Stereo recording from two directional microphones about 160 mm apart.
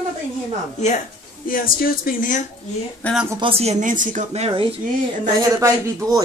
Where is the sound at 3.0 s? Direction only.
10° left (ahead or behind).